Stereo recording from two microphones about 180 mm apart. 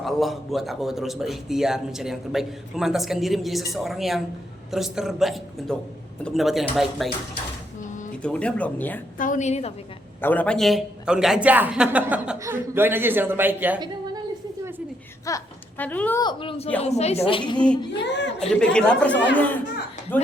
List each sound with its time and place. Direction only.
0.0 s speech: centre (ahead or behind)
8.2 s speech: 5° left (ahead or behind)
9.1 s a woman's voice: 45° left (ahead or behind)
10.2 s speech: 10° left (ahead or behind); by 13.7 s 10° right (ahead or behind)
13.7 s a sound: 25° right (ahead or behind)
15.3 s speech: 20° left (ahead or behind)
16.2 s a woman's voice: 30° left (ahead or behind)
18.3 s speech: 5° left (ahead or behind)